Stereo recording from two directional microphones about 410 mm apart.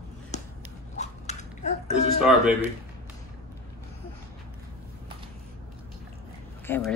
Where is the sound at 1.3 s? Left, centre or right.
Centre.